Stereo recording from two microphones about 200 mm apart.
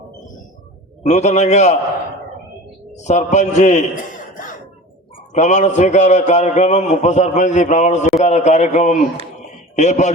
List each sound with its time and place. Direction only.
1.0 s a man's voice: 35° left (ahead or behind)
2.9 s a man's voice: 35° left (ahead or behind)
5.3 s a man's voice: 35° left (ahead or behind)